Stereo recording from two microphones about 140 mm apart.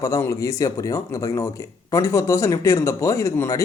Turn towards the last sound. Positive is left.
turn(degrees=20)  # may be behind; listen again after turning